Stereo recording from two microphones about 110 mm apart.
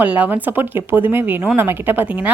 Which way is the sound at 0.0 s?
15° right (ahead or behind).